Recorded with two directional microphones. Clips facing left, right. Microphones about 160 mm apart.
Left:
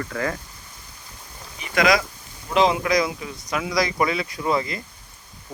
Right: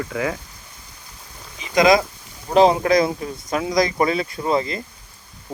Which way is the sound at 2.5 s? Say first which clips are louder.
Right 5 dB; 40° right (ahead or behind).